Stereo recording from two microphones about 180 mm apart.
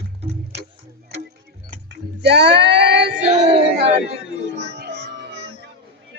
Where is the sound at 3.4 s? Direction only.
30° right (ahead or behind).